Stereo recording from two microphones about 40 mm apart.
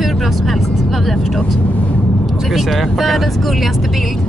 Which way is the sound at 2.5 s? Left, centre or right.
Centre.